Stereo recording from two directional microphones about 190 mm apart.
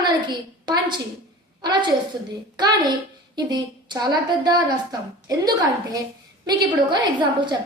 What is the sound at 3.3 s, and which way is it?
A woman's voice, 20° right (ahead or behind).